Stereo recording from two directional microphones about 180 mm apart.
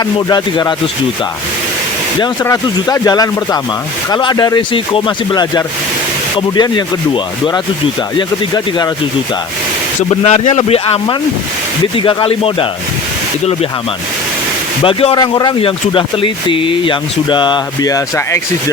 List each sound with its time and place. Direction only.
0.0 s speech: 20° left (ahead or behind)
2.4 s speech: 20° left (ahead or behind)
10.1 s speech: 35° left (ahead or behind)
14.8 s speech: 25° left (ahead or behind)